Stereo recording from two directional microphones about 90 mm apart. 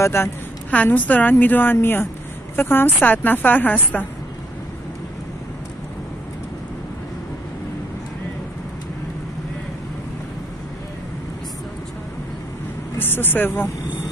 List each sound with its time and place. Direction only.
0.0 s a woman's voice: 30° left (ahead or behind)
0.7 s a woman's voice: 15° left (ahead or behind)
13.0 s a woman's voice: 25° left (ahead or behind)